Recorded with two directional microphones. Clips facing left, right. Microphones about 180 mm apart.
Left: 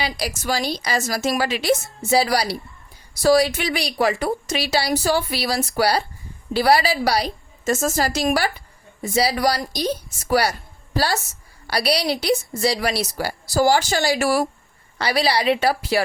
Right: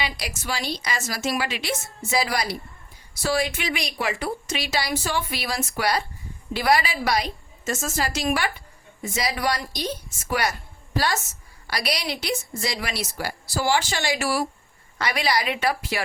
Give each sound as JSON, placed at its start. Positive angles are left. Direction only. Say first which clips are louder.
{"t": 0.0, "sound": "a woman's voice", "louder": "left 5 dB", "side_deg": 35}
{"t": 14.9, "sound": "speech", "louder": "left 4 dB", "side_deg": 30}